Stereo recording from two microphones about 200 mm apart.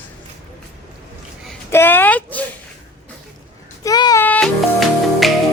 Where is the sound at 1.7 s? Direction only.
10° left (ahead or behind).